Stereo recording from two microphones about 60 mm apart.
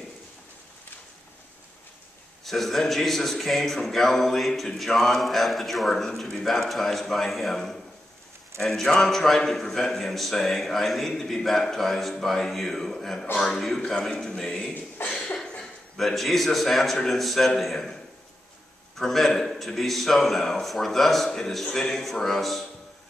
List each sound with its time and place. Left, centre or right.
2.4 s a man's voice: centre
15.0 s a sound: left
15.6 s a man's voice: centre
18.9 s a man's voice: centre